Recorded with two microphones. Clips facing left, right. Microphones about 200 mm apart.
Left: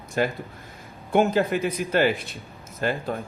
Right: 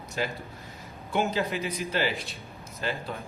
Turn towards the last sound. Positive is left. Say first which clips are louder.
# left 6 dB
turn(degrees=50)  # may be behind; listen again after turning